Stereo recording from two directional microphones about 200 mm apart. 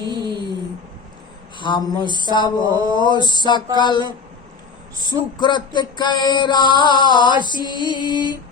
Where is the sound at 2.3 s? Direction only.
20° left (ahead or behind).